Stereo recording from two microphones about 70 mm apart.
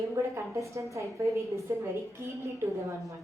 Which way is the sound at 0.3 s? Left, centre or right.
Right.